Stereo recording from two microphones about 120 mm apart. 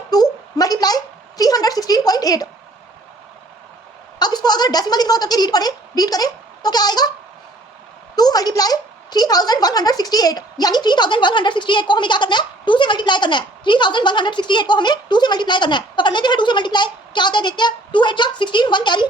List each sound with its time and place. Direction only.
0.1 s a sound: 35° left (ahead or behind)
4.2 s a woman's voice: 35° left (ahead or behind)
8.1 s a woman's voice: 35° left (ahead or behind)